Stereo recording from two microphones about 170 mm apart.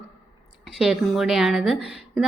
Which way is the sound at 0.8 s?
Centre (ahead or behind).